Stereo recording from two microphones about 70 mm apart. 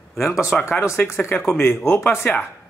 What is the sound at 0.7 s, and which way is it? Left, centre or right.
Speech, left.